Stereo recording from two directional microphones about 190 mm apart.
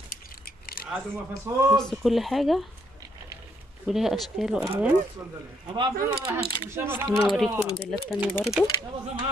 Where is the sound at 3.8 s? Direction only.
Centre (ahead or behind).